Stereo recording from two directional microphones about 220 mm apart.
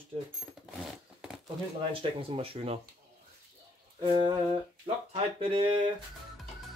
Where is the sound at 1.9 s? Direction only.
25° right (ahead or behind).